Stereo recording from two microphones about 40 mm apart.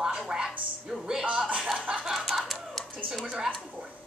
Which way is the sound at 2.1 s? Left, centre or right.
Centre.